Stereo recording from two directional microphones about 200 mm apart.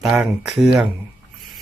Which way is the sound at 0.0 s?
Centre (ahead or behind).